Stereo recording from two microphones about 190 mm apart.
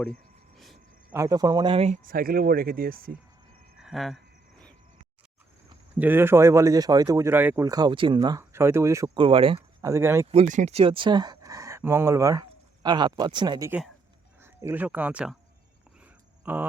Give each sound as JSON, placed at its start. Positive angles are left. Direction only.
{"t": 0.5, "sound": "a sound", "side_deg": 0}
{"t": 1.1, "sound": "speech", "side_deg": -15}
{"t": 2.0, "sound": "speech", "side_deg": -50}
{"t": 3.8, "sound": "speech", "side_deg": 0}
{"t": 6.0, "sound": "speech", "side_deg": -10}
{"t": 9.1, "sound": "speech", "side_deg": -30}
{"t": 9.8, "sound": "speech", "side_deg": -15}
{"t": 10.3, "sound": "speech", "side_deg": -40}
{"t": 13.7, "sound": "speech", "side_deg": -5}
{"t": 16.4, "sound": "speech", "side_deg": -10}